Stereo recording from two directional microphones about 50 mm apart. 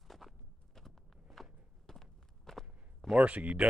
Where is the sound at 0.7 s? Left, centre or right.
Centre.